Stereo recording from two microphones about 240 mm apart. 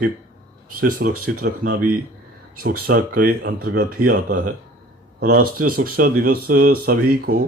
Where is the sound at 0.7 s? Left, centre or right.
Right.